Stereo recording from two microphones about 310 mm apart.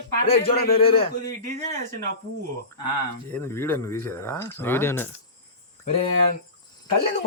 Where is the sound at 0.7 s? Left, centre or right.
Centre.